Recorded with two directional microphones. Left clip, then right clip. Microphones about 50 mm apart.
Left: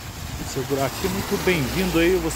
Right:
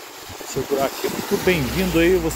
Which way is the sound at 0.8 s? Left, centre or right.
Centre.